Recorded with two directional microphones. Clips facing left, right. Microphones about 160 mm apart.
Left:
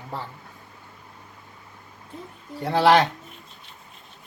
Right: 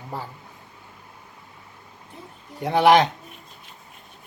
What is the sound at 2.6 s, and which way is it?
Speech, 15° right (ahead or behind).